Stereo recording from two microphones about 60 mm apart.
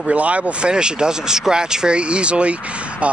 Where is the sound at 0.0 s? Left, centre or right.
Right.